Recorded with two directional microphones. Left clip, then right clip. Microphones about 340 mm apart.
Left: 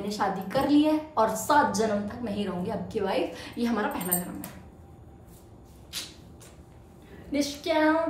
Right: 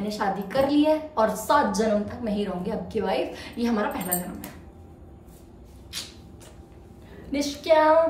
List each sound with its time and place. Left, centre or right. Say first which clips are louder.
0.1 s a woman's voice: right 1 dB; centre
7.3 s a woman's voice: right 6 dB; centre